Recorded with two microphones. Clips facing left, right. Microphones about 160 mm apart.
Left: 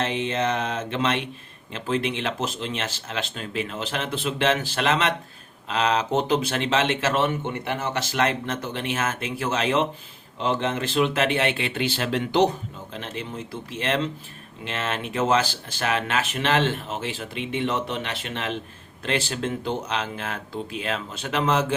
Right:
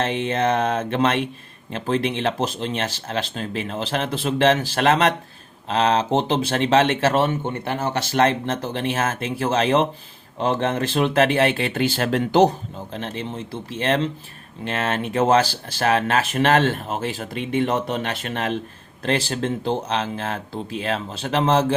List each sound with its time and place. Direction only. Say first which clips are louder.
0.0 s mantra: right 3 dB; 45° right (ahead or behind)
1.7 s speech: right 3 dB; 35° right (ahead or behind)
5.6 s speech: right 4 dB; 30° right (ahead or behind)
12.9 s speech: right 4 dB; 35° right (ahead or behind)